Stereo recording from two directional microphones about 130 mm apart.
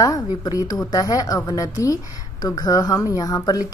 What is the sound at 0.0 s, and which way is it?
Speech, 25° left (ahead or behind).